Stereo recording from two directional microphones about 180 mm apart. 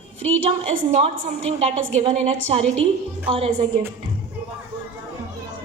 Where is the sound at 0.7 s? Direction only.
35° right (ahead or behind).